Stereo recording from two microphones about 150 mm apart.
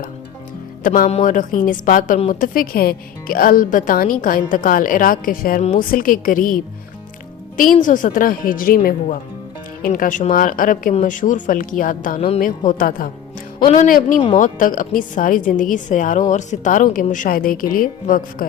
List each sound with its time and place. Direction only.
0.9 s a woman's voice: 60° left (ahead or behind)
9.8 s a woman's voice: 65° left (ahead or behind)